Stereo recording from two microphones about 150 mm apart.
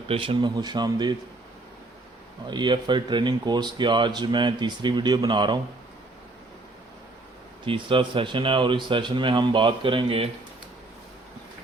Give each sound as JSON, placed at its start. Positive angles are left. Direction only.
{"t": 0.1, "sound": "speech", "side_deg": -35}
{"t": 2.5, "sound": "speech", "side_deg": -30}
{"t": 7.6, "sound": "speech", "side_deg": -35}